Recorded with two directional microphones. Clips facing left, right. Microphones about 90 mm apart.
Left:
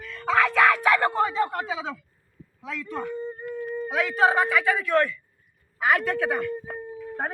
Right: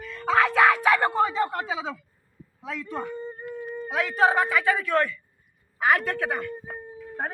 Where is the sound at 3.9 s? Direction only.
Centre (ahead or behind).